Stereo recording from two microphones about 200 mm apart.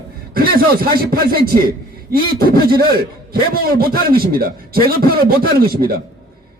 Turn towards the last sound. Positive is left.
turn(degrees=-50)  # may be behind; listen again after turning